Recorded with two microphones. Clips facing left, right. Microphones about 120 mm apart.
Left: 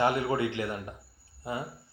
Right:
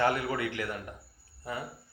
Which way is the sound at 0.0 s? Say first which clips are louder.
Left 2 dB; 20° left (ahead or behind).